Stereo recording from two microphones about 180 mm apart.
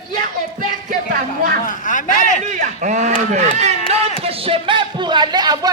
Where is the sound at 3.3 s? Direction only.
40° right (ahead or behind).